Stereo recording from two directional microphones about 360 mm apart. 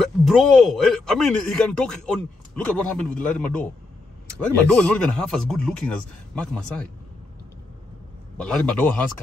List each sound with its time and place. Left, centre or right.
0.0 s speech: centre
8.4 s speech: centre